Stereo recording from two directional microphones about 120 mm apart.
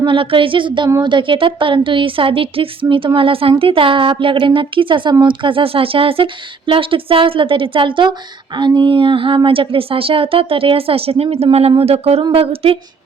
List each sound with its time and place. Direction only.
0.0 s speech: 45° right (ahead or behind)